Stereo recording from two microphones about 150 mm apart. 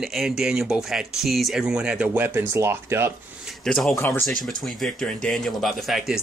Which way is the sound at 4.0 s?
15° left (ahead or behind).